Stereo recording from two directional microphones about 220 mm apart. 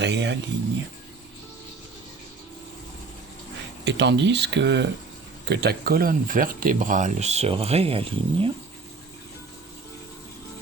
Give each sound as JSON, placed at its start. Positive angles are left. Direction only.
{"t": 0.0, "sound": "speech", "side_deg": -50}
{"t": 3.8, "sound": "speech", "side_deg": -55}